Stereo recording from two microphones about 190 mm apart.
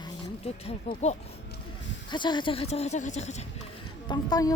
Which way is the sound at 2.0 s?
25° left (ahead or behind).